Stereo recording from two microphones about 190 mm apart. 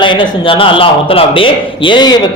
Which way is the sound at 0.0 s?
25° left (ahead or behind).